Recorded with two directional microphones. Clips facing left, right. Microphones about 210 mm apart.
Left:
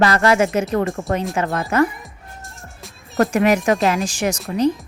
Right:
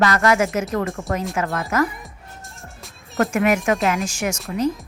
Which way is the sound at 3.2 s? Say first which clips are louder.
Left 3 dB; 35° left (ahead or behind).